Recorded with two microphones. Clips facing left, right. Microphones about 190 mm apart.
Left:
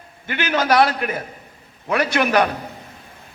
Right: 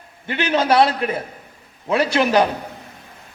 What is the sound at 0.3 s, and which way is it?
A man's voice, 30° right (ahead or behind).